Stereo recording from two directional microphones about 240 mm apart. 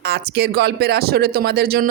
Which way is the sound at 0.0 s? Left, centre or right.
Right.